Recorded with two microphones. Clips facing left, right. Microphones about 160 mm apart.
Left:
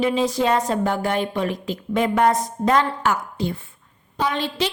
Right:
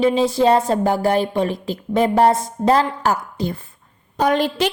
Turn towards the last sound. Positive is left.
turn(degrees=-45)  # may be behind; listen again after turning